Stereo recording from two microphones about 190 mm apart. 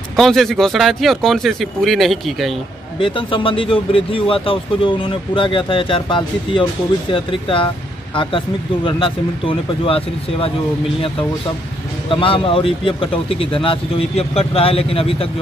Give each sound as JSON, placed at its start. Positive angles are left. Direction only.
{"t": 0.1, "sound": "speech", "side_deg": 0}
{"t": 3.0, "sound": "speech", "side_deg": 25}
{"t": 12.1, "sound": "speech", "side_deg": 30}